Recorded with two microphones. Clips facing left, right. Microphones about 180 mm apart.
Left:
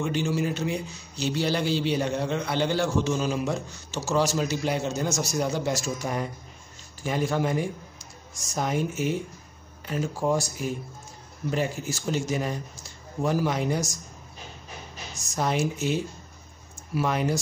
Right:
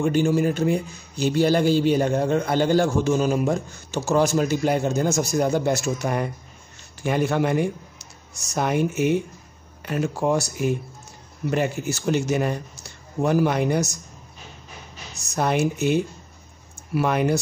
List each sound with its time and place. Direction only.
0.0 s speech: 50° right (ahead or behind)
15.3 s speech: 60° right (ahead or behind)